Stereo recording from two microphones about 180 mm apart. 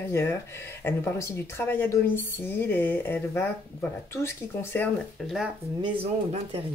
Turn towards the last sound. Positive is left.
turn(degrees=-30)  # may be behind; listen again after turning